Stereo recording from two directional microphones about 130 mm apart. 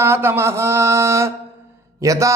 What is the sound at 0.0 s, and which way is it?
Mantra, 20° right (ahead or behind).